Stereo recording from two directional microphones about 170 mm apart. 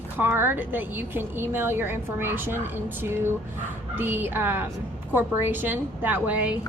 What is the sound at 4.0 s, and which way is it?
A woman's voice, 10° right (ahead or behind).